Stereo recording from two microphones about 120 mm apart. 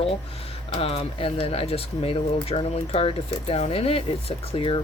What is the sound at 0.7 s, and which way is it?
Speech, 55° left (ahead or behind).